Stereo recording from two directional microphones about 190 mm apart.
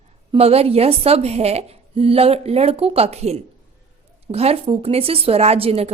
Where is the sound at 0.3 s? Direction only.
30° right (ahead or behind).